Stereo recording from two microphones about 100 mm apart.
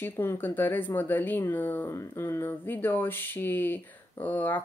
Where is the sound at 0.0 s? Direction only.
20° left (ahead or behind).